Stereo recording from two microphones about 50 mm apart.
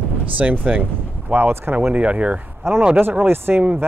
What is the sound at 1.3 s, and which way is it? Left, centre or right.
Speech, right.